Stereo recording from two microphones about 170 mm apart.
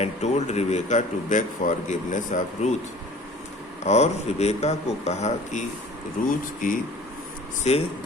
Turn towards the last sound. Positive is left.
turn(degrees=40)  # may be behind; listen again after turning